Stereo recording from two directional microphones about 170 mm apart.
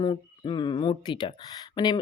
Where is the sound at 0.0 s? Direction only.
25° left (ahead or behind).